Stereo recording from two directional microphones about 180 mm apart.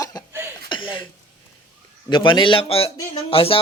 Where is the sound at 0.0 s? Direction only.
20° left (ahead or behind).